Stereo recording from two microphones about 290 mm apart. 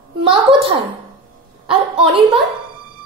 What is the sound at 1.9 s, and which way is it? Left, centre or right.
Speech, centre.